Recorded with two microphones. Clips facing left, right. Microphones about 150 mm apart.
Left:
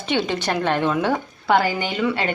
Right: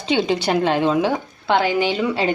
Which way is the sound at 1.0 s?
Centre (ahead or behind).